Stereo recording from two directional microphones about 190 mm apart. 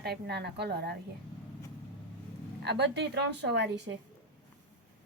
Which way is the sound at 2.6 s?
60° right (ahead or behind).